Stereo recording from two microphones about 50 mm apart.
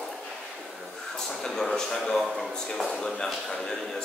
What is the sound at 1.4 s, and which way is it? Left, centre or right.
A man's voice, centre.